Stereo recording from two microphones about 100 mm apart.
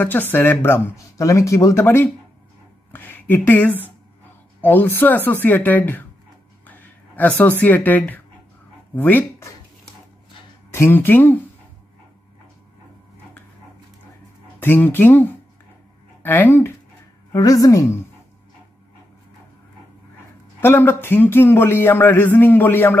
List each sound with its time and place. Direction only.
0.0 s speech: 20° left (ahead or behind)
10.7 s speech: 25° left (ahead or behind)
14.6 s speech: 20° left (ahead or behind)
17.3 s speech: 35° left (ahead or behind)
20.6 s speech: 20° left (ahead or behind)